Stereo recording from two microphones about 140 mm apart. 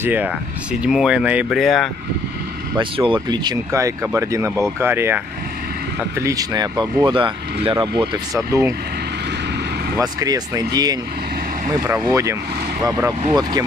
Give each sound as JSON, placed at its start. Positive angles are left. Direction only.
{"t": 0.0, "sound": "speech", "side_deg": -15}
{"t": 2.8, "sound": "speech", "side_deg": -35}
{"t": 9.9, "sound": "speech", "side_deg": -25}
{"t": 12.0, "sound": "speech", "side_deg": -25}